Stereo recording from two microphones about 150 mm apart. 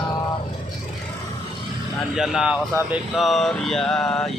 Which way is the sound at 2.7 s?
15° right (ahead or behind).